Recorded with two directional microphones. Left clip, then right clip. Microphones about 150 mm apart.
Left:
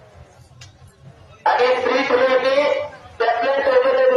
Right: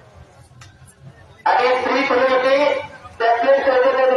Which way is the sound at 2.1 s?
55° left (ahead or behind).